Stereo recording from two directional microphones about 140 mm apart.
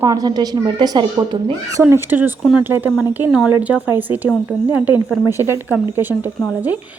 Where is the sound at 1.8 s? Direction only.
15° right (ahead or behind).